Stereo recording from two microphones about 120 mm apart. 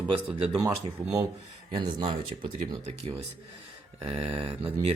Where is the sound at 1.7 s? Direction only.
45° right (ahead or behind).